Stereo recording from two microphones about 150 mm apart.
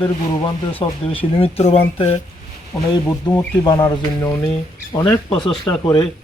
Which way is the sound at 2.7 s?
15° left (ahead or behind).